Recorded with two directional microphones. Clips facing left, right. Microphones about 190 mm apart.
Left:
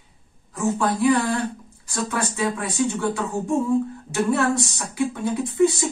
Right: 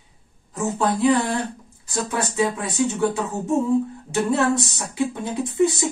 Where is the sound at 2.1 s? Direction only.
20° right (ahead or behind).